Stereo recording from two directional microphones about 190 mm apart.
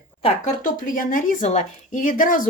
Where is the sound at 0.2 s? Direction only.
35° left (ahead or behind).